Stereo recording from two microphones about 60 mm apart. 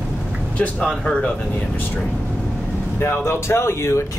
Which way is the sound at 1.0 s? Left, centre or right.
Centre.